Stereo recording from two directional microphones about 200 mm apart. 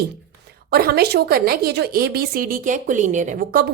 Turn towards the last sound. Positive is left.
turn(degrees=-45)  # may be behind; listen again after turning